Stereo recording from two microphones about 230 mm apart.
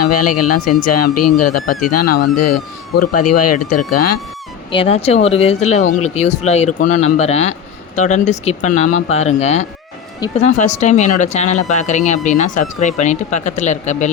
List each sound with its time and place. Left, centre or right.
0.0 s speech: left
2.0 s speech: left
3.2 s speech: left
4.8 s speech: left